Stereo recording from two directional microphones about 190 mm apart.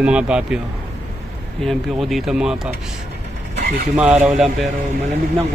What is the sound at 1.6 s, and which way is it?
Speech, centre (ahead or behind).